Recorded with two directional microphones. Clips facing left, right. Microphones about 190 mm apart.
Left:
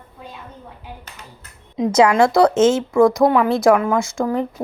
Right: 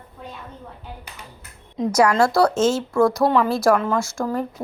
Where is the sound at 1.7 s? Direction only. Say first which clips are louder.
Left 3 dB; 20° left (ahead or behind).